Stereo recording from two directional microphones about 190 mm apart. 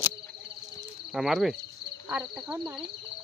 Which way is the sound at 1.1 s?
Centre (ahead or behind).